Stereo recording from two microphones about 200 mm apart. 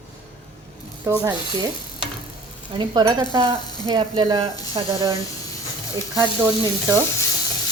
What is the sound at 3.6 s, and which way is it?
Speech, 20° left (ahead or behind).